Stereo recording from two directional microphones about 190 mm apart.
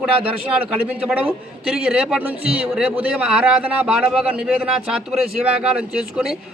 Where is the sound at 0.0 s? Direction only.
5° right (ahead or behind).